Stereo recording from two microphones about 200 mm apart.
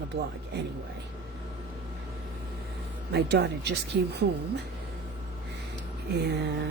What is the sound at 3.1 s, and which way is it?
Speech, 55° right (ahead or behind).